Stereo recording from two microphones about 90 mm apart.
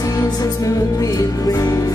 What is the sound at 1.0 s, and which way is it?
Music, 40° left (ahead or behind).